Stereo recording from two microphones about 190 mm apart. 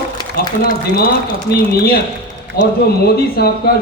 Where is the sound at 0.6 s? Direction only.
50° left (ahead or behind).